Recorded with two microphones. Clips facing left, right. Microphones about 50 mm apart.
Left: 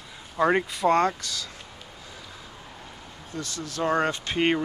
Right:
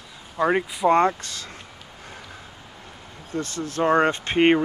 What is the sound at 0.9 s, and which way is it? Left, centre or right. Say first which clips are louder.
Speech: right 4 dB; right.